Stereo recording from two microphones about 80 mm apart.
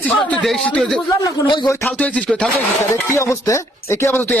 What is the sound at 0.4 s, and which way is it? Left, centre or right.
A man's voice, centre.